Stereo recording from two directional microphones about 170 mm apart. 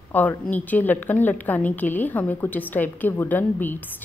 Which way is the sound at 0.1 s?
10° left (ahead or behind).